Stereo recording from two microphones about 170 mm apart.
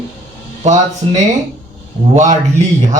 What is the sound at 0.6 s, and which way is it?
A man's voice, 45° right (ahead or behind).